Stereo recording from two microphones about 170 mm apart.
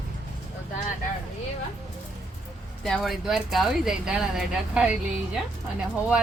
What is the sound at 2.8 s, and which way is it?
Speech, centre (ahead or behind).